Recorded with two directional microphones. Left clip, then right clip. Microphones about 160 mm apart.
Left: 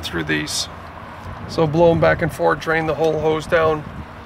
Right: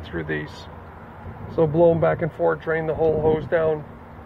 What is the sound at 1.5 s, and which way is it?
Speech, 40° left (ahead or behind).